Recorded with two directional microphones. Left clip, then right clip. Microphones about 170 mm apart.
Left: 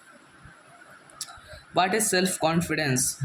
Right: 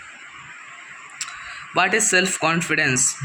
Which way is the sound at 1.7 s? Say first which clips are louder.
Right 5 dB; centre (ahead or behind).